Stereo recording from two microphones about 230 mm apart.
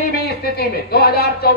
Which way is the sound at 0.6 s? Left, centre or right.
Left.